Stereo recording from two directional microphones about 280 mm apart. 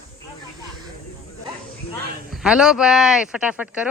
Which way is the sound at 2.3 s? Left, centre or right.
Centre.